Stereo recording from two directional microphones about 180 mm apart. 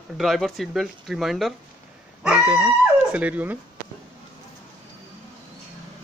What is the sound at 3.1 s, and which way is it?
Speech, 10° right (ahead or behind).